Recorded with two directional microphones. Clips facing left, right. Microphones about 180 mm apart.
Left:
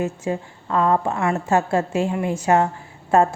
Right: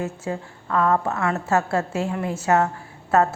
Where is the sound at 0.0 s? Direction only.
25° left (ahead or behind).